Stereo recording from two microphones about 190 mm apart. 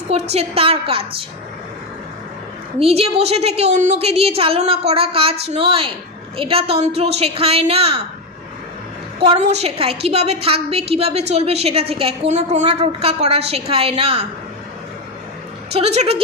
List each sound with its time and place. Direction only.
0.1 s a woman's voice: 35° right (ahead or behind)
2.7 s a woman's voice: 30° right (ahead or behind)
9.2 s a woman's voice: 30° right (ahead or behind)
15.7 s a woman's voice: 35° right (ahead or behind)